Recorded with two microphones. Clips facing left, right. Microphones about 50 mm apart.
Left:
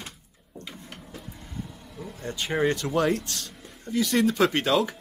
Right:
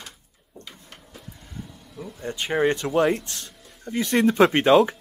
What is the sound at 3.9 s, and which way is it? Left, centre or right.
Cough, right.